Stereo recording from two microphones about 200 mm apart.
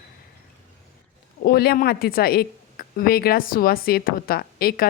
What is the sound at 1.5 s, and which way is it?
Speech, 50° left (ahead or behind).